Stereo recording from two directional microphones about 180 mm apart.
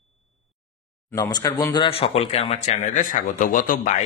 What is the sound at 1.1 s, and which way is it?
Speech, 20° left (ahead or behind).